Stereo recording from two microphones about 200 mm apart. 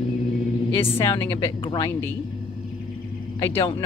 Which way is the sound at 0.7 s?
15° left (ahead or behind).